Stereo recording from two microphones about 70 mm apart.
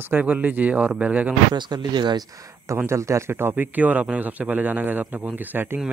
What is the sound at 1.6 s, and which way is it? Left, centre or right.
Speech, right.